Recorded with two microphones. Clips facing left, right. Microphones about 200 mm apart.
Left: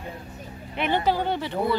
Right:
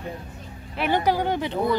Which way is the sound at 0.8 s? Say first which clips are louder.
Right 1 dB; 15° right (ahead or behind).